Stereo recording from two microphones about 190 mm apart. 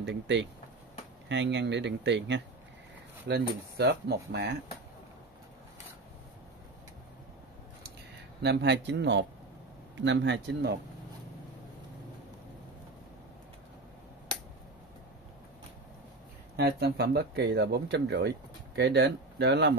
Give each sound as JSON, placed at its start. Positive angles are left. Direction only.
{"t": 0.0, "sound": "speech", "side_deg": -70}
{"t": 8.4, "sound": "speech", "side_deg": -65}
{"t": 16.5, "sound": "speech", "side_deg": -60}